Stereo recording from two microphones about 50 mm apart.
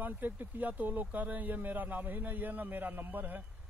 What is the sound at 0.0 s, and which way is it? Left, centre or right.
A man's voice, right.